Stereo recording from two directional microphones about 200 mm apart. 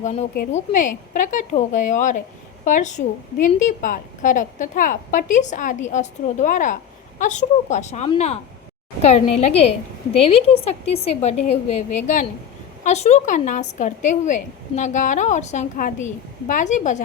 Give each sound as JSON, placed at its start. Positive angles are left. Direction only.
{"t": 0.0, "sound": "a woman's voice", "side_deg": 35}